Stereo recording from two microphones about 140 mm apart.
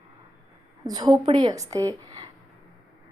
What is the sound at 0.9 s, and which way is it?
A woman's voice, 30° right (ahead or behind).